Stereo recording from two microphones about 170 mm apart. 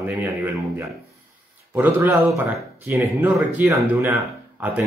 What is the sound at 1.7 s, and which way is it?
Speech, 10° right (ahead or behind).